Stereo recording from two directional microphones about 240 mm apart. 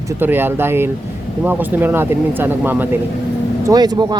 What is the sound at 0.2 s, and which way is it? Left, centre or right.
Speech, centre.